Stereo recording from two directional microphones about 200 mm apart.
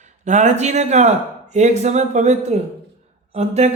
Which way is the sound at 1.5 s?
35° right (ahead or behind).